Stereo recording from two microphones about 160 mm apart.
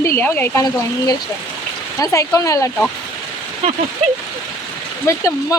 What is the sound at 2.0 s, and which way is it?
Speech, 20° left (ahead or behind).